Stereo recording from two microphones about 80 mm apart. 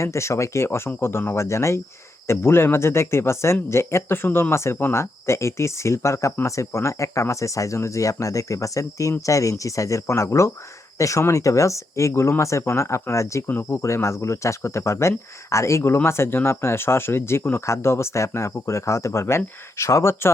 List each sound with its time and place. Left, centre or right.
0.0 s speech: left